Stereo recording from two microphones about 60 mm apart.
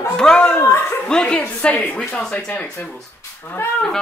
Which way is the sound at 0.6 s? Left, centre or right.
Left.